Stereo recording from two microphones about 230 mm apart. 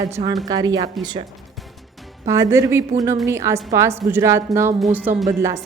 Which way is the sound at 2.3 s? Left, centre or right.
Centre.